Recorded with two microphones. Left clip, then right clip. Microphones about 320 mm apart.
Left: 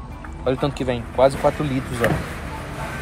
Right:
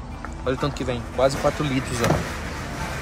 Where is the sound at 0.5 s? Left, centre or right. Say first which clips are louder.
Left 3 dB; centre.